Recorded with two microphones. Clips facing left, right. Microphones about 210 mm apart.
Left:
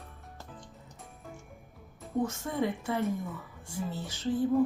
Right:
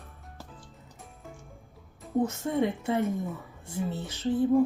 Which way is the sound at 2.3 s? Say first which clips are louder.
Right 4 dB; 20° right (ahead or behind).